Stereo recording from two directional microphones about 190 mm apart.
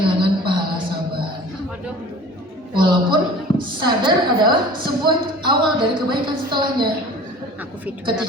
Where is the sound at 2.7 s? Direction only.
25° right (ahead or behind).